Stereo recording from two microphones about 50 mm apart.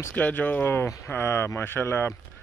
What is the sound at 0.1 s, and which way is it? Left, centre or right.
Speech, left.